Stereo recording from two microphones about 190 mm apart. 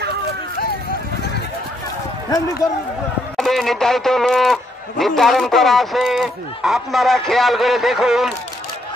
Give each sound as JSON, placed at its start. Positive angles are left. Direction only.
{"t": 2.3, "sound": "speech", "side_deg": 20}
{"t": 3.3, "sound": "a man's voice", "side_deg": 0}